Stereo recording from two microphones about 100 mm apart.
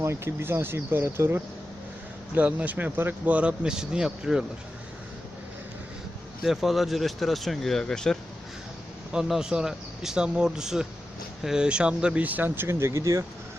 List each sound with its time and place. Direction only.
0.0 s speech: 25° right (ahead or behind)
2.3 s speech: 15° right (ahead or behind)
6.4 s speech: centre (ahead or behind)
9.1 s speech: 5° right (ahead or behind); by 13.2 s 30° right (ahead or behind)